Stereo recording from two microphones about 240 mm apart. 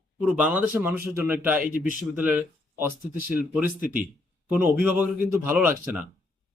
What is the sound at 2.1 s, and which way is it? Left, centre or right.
Speech, centre.